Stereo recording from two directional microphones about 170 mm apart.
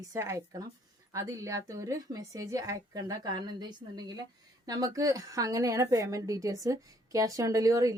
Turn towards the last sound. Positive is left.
turn(degrees=-20)  # may be behind; listen again after turning